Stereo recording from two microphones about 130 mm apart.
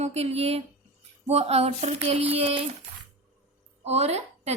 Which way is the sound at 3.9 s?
55° right (ahead or behind).